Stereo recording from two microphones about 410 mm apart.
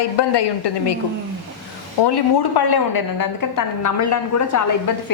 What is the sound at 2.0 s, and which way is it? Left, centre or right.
A woman's voice, left.